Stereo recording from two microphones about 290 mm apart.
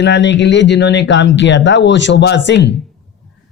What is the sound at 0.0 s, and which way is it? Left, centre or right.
Speech, left.